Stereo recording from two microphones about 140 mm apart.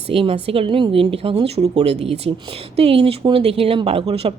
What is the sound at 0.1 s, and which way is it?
A woman's voice, 45° right (ahead or behind).